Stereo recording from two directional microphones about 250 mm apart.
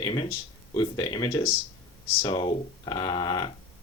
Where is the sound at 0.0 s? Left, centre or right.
Centre.